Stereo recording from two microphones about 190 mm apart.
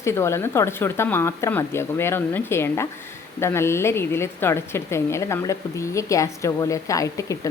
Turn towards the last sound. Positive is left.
turn(degrees=15)  # may be behind; listen again after turning